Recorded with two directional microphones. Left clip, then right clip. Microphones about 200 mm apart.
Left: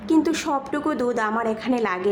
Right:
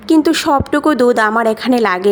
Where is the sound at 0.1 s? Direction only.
40° right (ahead or behind).